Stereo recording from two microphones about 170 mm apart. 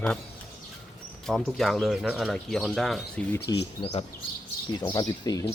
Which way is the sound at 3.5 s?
20° left (ahead or behind).